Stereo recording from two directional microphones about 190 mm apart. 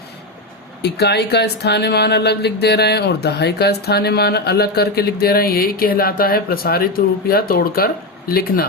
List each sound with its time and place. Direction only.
0.8 s speech: 60° left (ahead or behind)